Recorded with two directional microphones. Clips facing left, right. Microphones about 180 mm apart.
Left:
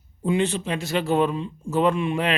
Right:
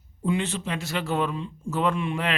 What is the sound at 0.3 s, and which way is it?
Speech, 20° left (ahead or behind).